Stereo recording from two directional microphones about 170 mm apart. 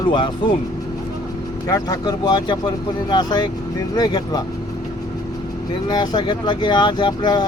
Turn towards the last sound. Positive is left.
turn(degrees=25)  # may be behind; listen again after turning